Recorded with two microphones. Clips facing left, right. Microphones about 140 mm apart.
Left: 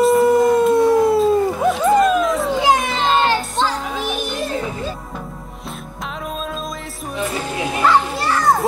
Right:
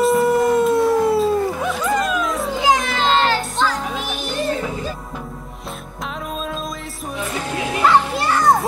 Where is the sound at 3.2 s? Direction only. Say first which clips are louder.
Left 1 dB; 20° left (ahead or behind).